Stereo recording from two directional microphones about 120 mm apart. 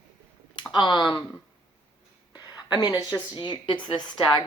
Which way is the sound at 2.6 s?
40° left (ahead or behind).